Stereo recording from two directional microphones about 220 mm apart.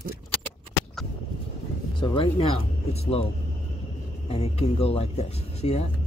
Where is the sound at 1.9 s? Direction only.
20° left (ahead or behind).